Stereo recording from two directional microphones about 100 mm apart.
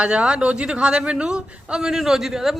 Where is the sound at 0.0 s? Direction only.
10° right (ahead or behind).